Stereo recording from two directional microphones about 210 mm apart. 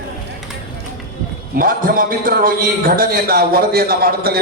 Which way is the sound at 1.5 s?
40° right (ahead or behind).